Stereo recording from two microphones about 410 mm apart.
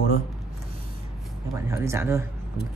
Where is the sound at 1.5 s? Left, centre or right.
Centre.